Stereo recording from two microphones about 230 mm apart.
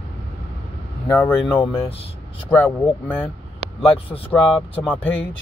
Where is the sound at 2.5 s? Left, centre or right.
Centre.